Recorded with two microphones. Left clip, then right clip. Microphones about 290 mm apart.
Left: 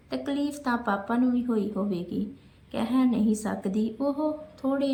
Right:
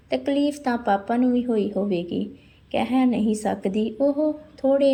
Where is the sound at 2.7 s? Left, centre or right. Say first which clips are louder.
Right 5 dB; centre.